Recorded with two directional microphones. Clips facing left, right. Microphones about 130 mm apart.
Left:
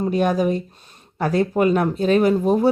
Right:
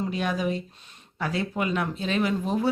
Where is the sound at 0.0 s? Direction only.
45° left (ahead or behind).